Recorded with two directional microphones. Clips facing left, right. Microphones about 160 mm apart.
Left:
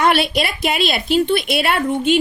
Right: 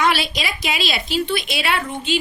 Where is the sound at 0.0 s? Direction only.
55° left (ahead or behind).